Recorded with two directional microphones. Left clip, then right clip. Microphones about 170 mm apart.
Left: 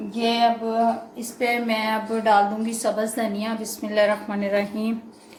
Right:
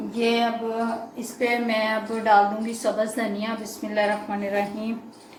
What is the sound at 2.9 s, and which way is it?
A woman's voice, 35° left (ahead or behind).